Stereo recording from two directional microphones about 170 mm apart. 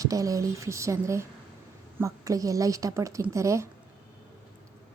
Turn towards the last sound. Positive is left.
turn(degrees=-15)  # may be behind; listen again after turning